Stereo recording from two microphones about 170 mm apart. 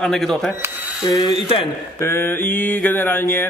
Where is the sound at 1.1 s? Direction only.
25° left (ahead or behind).